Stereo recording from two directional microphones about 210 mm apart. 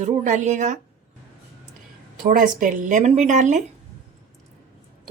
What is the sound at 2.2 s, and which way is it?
Speech, 40° right (ahead or behind).